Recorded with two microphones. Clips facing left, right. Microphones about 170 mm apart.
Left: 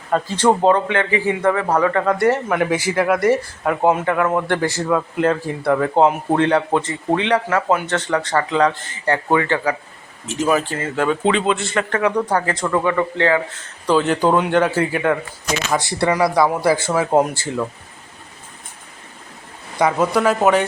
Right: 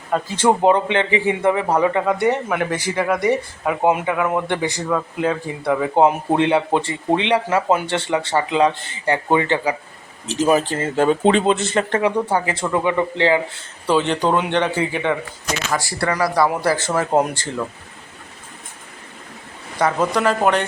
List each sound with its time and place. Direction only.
0.1 s speech: 5° right (ahead or behind)
0.4 s speech: 15° right (ahead or behind)
2.0 s speech: centre (ahead or behind)
6.0 s speech: 15° right (ahead or behind)
12.3 s speech: 10° right (ahead or behind)
13.8 s speech: centre (ahead or behind)
15.7 s speech: 20° left (ahead or behind); by 17.7 s 5° left (ahead or behind)
19.8 s speech: 10° left (ahead or behind)